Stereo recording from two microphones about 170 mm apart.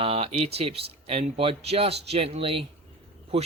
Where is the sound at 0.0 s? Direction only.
35° right (ahead or behind).